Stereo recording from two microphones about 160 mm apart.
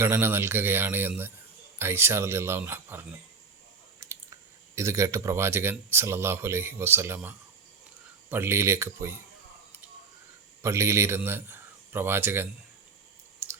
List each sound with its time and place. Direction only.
0.0 s speech: 15° right (ahead or behind)
4.0 s a sound: 20° right (ahead or behind)
4.7 s speech: 20° right (ahead or behind)
10.6 s a man's voice: 15° right (ahead or behind)
13.4 s chewing: 15° right (ahead or behind)